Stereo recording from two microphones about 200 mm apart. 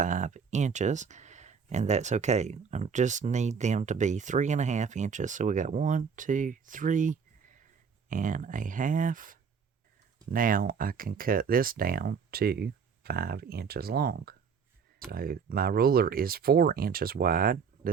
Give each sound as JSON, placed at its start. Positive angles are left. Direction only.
{"t": 0.0, "sound": "speech", "side_deg": -40}